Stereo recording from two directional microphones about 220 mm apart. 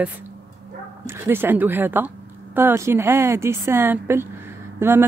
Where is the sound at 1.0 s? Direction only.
10° right (ahead or behind).